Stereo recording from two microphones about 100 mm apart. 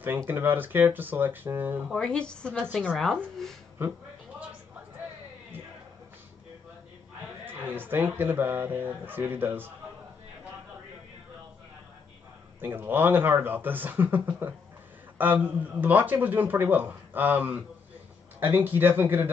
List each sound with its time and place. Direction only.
0.3 s speech: 20° right (ahead or behind)
2.0 s a woman's voice: 10° left (ahead or behind)
3.8 s speech: 20° right (ahead or behind)
7.4 s speech: 20° right (ahead or behind)
12.5 s a man's voice: 20° right (ahead or behind)